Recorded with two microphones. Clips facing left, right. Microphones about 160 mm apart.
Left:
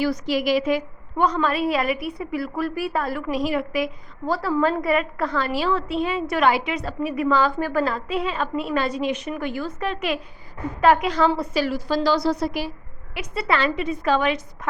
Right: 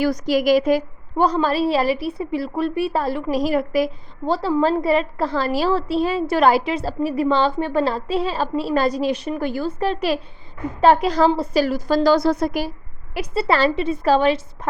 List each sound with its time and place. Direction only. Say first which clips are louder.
0.0 s a woman's voice: right 4 dB; 40° right (ahead or behind)
4.3 s a woman's voice: right 3 dB; 25° right (ahead or behind); by 12.7 s 45° right (ahead or behind)
13.1 s a woman's voice: right 4 dB; 35° right (ahead or behind)